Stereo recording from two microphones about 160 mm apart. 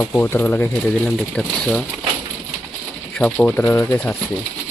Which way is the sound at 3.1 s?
5° left (ahead or behind).